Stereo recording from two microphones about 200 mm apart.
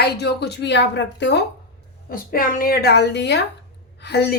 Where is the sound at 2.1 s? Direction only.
45° left (ahead or behind).